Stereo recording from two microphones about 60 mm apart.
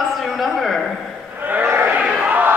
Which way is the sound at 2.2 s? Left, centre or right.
Right.